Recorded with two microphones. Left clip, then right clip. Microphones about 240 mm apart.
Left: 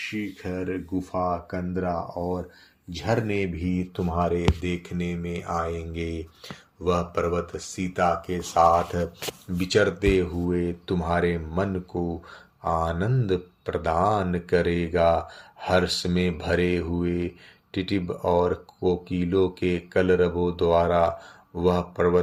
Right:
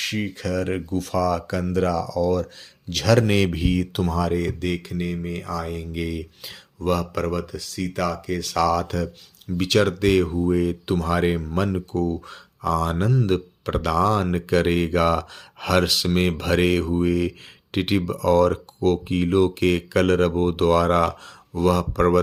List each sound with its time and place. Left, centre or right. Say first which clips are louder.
0.0 s speech: right 5 dB; right